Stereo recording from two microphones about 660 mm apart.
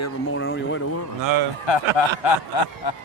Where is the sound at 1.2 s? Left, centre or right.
Right.